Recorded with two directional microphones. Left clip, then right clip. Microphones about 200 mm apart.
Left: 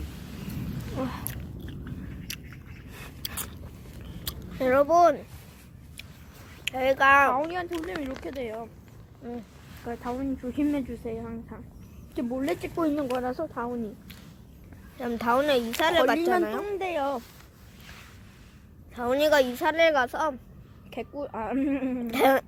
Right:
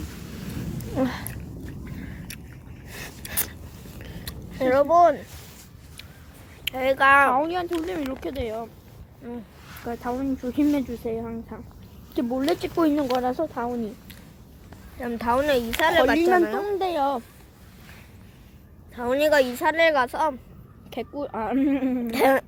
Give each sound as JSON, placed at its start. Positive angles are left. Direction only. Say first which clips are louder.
{"t": 0.9, "sound": "speech", "louder": "right 7 dB", "side_deg": -40}
{"t": 4.3, "sound": "a sound", "louder": "right 2 dB", "side_deg": 25}
{"t": 6.7, "sound": "speech", "louder": "right 2 dB", "side_deg": 0}
{"t": 7.3, "sound": "speech", "louder": "right 5 dB", "side_deg": -20}
{"t": 9.2, "sound": "speech", "louder": "right 1 dB", "side_deg": 5}
{"t": 9.8, "sound": "speech", "louder": "right 4 dB", "side_deg": -15}
{"t": 14.9, "sound": "speech", "louder": "right 1 dB", "side_deg": 15}
{"t": 16.7, "sound": "speech", "louder": "right 5 dB", "side_deg": -20}
{"t": 18.9, "sound": "speech", "louder": "right 2 dB", "side_deg": 10}
{"t": 20.9, "sound": "speech", "louder": "right 4 dB", "side_deg": -20}
{"t": 22.1, "sound": "speech", "louder": "right 2 dB", "side_deg": 10}